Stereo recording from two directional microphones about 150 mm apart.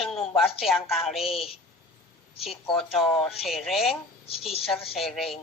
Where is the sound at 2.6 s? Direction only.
40° left (ahead or behind).